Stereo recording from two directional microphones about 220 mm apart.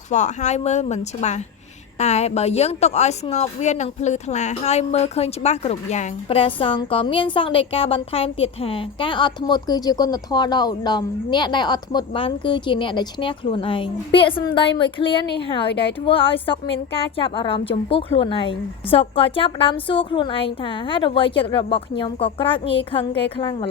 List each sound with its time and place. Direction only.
0.1 s a woman's voice: 30° left (ahead or behind)